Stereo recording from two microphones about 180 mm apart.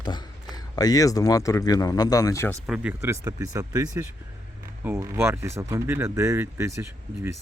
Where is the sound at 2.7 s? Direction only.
10° right (ahead or behind).